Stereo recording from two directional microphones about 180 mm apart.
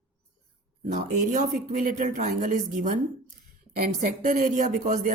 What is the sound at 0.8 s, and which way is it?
Speech, 45° right (ahead or behind).